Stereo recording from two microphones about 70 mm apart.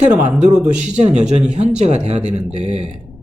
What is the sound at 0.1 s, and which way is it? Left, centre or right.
Speech, centre.